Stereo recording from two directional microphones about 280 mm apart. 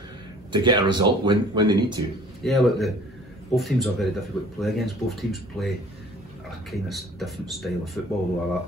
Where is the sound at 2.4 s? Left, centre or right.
Centre.